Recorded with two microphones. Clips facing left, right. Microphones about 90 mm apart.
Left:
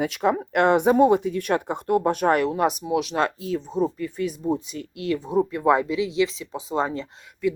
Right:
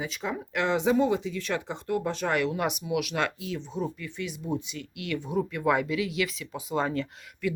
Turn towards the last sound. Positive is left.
turn(degrees=25)  # may be behind; listen again after turning